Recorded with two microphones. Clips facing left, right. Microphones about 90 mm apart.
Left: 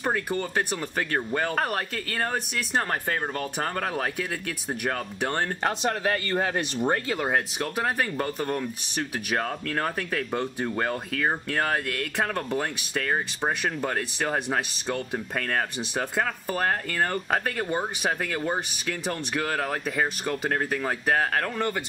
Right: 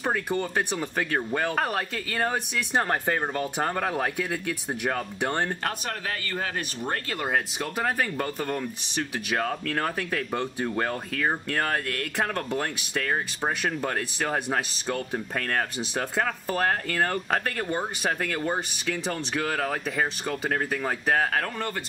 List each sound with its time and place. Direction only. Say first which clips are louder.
0.0 s speech: even; centre (ahead or behind)
2.9 s speech: right 2 dB; 20° right (ahead or behind)
3.6 s speech: right 1 dB; 5° right (ahead or behind)
5.9 s speech: left 6 dB; 35° left (ahead or behind)
7.1 s speech: left 2 dB; centre (ahead or behind)